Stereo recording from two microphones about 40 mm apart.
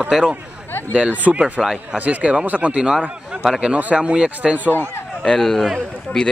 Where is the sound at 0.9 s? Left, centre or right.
Right.